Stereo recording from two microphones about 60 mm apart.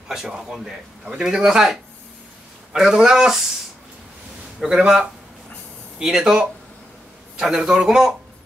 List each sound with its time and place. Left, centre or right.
0.1 s a man's voice: centre
4.6 s a man's voice: centre